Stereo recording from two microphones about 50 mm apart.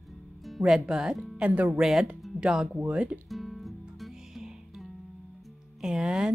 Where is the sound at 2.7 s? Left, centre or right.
Centre.